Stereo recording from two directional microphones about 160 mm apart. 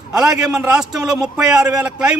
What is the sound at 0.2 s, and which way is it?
A man's voice, 5° right (ahead or behind).